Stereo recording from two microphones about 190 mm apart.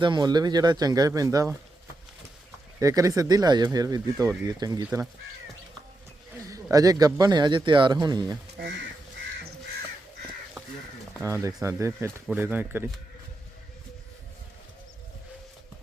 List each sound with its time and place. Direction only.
0.0 s speech: 25° right (ahead or behind)
2.8 s speech: 15° right (ahead or behind)
6.5 s speech: 20° right (ahead or behind)
11.3 s speech: 15° right (ahead or behind)